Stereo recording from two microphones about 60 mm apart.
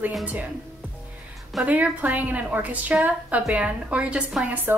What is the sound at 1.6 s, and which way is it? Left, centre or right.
A woman's voice, right.